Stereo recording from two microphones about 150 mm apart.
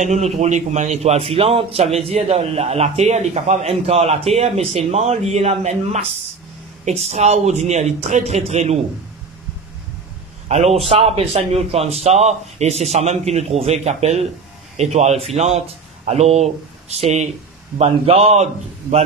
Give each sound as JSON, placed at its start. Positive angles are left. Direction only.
{"t": 0.0, "sound": "a man's voice", "side_deg": -50}
{"t": 10.5, "sound": "a man's voice", "side_deg": -45}